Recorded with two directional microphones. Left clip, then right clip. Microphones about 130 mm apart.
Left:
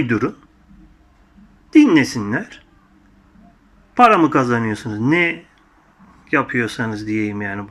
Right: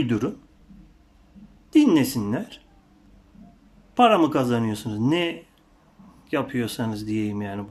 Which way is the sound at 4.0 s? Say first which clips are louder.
Left 6 dB; 20° right (ahead or behind).